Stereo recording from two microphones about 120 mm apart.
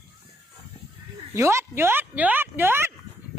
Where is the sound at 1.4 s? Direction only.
25° right (ahead or behind).